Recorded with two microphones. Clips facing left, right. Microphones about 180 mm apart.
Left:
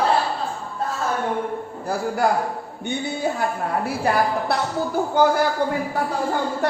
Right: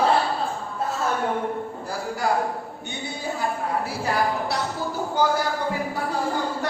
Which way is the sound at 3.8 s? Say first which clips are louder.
Left 5 dB; 55° left (ahead or behind).